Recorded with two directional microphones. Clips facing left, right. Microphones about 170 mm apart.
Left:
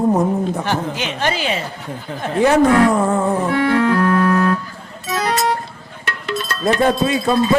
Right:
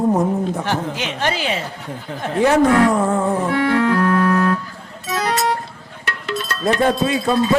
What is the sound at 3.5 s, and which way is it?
Organ, 10° left (ahead or behind).